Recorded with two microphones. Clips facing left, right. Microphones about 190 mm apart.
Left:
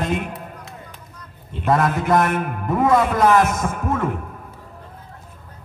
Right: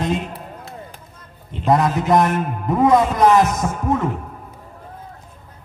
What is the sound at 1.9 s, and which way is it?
Heart sounds, 20° right (ahead or behind).